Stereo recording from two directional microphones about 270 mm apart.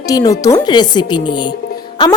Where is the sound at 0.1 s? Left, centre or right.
Centre.